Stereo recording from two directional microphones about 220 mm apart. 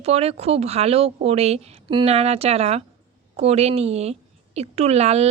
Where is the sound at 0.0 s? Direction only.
30° right (ahead or behind).